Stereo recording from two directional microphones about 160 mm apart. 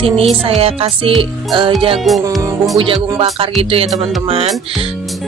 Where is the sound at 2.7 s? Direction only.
35° right (ahead or behind).